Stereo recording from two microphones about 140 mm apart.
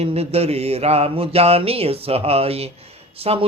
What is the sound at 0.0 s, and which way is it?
Speech, 50° right (ahead or behind).